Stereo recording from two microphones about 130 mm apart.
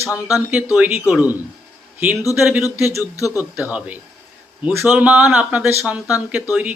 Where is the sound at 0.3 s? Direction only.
10° right (ahead or behind).